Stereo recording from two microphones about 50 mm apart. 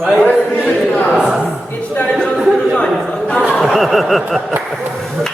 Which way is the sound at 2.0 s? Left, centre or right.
Left.